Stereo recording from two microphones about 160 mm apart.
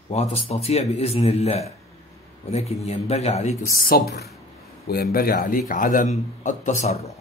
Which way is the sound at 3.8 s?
70° left (ahead or behind).